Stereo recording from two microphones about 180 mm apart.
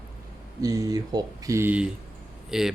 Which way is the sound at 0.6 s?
20° right (ahead or behind).